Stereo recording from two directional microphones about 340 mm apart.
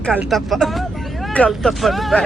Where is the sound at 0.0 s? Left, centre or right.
Centre.